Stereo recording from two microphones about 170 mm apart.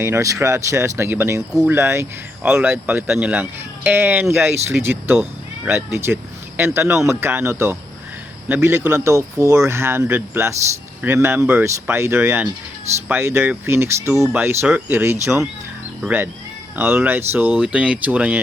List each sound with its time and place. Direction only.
0.0 s speech: 15° right (ahead or behind)